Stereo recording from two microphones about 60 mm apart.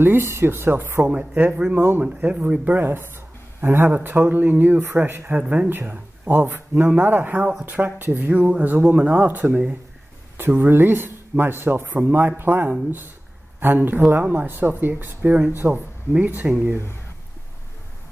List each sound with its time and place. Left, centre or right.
0.0 s speech: right
1.0 s speech: right
1.8 s speech: right
5.4 s speech: centre
5.7 s speech: right